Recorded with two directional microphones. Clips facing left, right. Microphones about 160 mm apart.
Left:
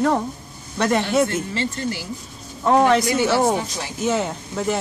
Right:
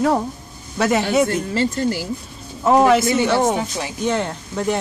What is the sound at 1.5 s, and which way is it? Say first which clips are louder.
Speech: right 5 dB; 45° right (ahead or behind).